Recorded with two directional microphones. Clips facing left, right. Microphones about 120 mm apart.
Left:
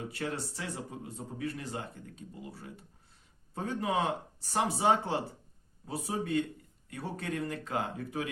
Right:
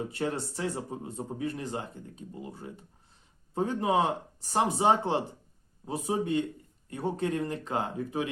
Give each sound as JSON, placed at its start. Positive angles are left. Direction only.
{"t": 0.1, "sound": "speech", "side_deg": -25}